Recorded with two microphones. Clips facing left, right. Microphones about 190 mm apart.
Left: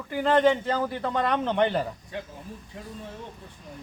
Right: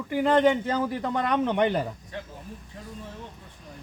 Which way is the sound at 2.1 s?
15° left (ahead or behind).